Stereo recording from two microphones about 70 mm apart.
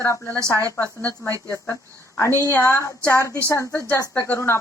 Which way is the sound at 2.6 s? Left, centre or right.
Left.